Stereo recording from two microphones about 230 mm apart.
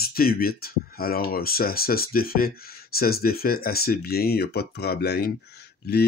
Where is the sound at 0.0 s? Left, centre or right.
Left.